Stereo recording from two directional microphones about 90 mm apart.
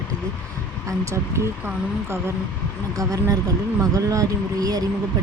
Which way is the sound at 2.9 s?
40° right (ahead or behind).